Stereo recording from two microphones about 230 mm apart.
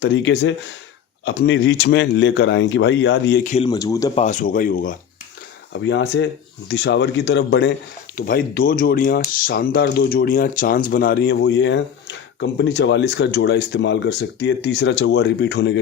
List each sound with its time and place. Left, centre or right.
0.0 s speech: left
3.4 s speech: left
3.7 s speech: centre
4.1 s speech: left
5.8 s speech: left
8.1 s speech: left